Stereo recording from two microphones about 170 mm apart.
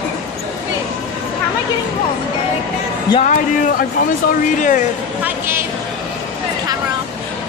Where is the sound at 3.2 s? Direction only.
50° left (ahead or behind).